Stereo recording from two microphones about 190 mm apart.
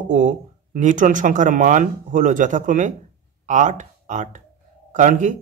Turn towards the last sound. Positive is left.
turn(degrees=-40)  # may be behind; listen again after turning